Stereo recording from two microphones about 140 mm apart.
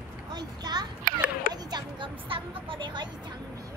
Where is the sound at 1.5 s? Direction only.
30° right (ahead or behind).